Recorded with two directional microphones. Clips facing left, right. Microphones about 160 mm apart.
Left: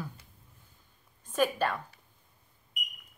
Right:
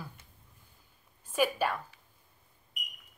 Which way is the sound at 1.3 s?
10° right (ahead or behind).